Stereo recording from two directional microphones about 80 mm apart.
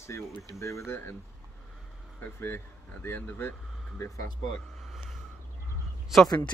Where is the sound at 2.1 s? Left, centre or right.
Left.